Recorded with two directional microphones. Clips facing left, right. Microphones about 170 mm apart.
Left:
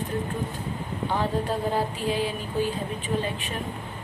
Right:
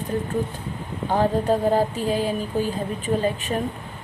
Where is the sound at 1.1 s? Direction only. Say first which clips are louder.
Right 7 dB; 45° right (ahead or behind).